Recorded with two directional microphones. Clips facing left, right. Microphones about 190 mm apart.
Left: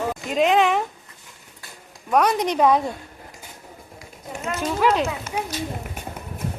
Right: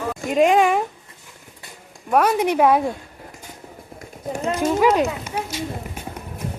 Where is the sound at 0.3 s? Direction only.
10° right (ahead or behind).